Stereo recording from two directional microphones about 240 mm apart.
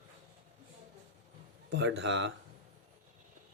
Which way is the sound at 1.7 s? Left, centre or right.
Right.